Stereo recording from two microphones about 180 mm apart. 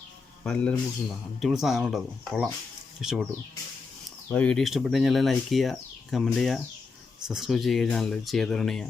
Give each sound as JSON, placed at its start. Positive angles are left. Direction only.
{"t": 0.4, "sound": "speech", "side_deg": 5}
{"t": 4.3, "sound": "speech", "side_deg": 5}